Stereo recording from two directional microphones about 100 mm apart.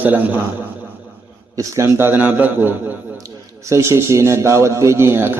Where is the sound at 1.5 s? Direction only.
30° right (ahead or behind).